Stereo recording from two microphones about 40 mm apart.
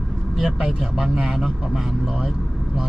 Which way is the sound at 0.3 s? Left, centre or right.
Centre.